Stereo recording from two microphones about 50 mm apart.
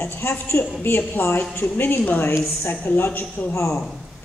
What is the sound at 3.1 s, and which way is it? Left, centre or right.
Speech, left.